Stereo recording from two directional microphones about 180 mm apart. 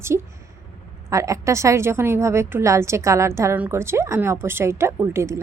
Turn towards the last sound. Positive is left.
turn(degrees=-15)  # may be behind; listen again after turning